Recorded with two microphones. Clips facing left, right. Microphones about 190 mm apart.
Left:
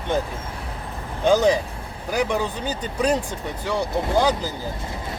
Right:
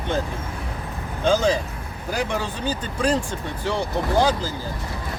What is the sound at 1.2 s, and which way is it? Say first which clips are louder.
Speech: left 2 dB; 15° left (ahead or behind).